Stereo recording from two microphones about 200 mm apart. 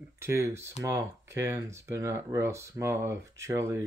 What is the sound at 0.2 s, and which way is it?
Speech, 15° right (ahead or behind).